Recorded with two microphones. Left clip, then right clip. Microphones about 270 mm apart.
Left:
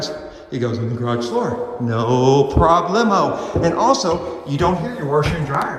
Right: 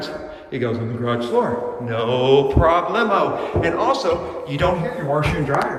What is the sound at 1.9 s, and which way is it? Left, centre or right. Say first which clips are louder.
Mantra: left 1 dB; left.